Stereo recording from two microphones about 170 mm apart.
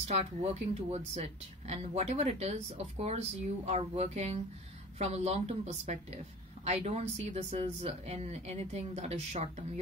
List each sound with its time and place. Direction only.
0.1 s speech: 35° right (ahead or behind)